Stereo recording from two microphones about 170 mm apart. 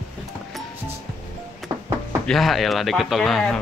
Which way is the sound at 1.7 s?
20° right (ahead or behind).